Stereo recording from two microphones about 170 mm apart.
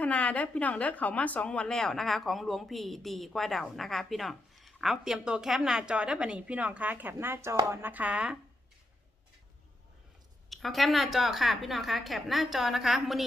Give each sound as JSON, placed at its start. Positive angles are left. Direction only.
{"t": 0.0, "sound": "a woman's voice", "side_deg": 10}
{"t": 10.5, "sound": "a woman's voice", "side_deg": 0}